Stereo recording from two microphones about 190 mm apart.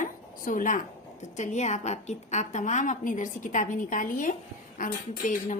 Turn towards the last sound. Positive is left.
turn(degrees=45)  # may be behind; listen again after turning